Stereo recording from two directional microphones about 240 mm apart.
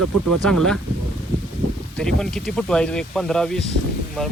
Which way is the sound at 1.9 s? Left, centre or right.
Centre.